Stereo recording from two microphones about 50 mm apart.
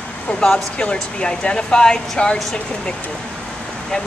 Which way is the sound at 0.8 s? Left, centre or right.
Centre.